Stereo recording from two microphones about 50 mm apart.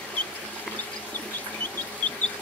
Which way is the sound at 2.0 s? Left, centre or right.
Left.